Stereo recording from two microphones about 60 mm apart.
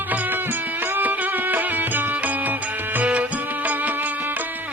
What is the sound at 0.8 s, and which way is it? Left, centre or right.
Music, right.